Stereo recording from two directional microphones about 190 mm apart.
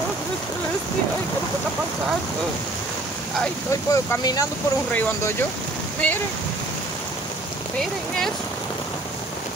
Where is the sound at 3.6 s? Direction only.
15° left (ahead or behind).